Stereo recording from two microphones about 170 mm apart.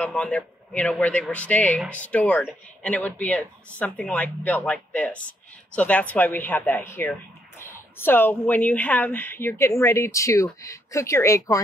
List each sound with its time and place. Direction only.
0.0 s speech: 5° left (ahead or behind)